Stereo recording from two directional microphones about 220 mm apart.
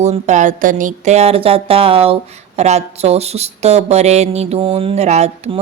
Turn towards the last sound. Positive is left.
turn(degrees=-30)  # may be behind; listen again after turning